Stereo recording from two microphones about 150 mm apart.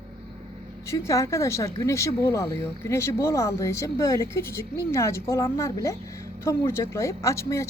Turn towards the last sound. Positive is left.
turn(degrees=20)  # may be behind; listen again after turning